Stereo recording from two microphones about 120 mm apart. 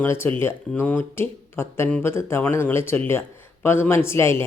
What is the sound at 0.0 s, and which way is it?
Speech, 20° left (ahead or behind).